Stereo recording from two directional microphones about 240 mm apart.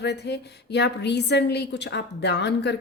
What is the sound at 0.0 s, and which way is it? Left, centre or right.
A woman's voice, left.